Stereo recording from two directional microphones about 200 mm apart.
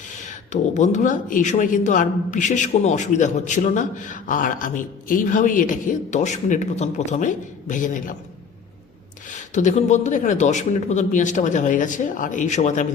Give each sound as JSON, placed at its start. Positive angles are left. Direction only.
{"t": 0.2, "sound": "speech", "side_deg": 40}
{"t": 9.6, "sound": "speech", "side_deg": 35}